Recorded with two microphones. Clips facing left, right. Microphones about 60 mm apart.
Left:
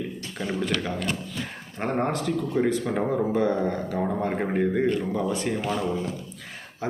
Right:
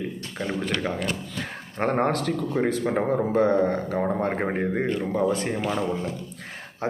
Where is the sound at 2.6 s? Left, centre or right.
Right.